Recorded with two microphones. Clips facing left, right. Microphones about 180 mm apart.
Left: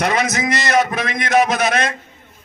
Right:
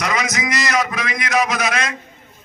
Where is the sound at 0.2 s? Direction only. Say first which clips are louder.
Left 3 dB; 55° left (ahead or behind).